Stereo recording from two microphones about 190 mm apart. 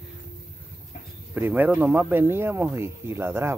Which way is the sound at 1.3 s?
10° right (ahead or behind).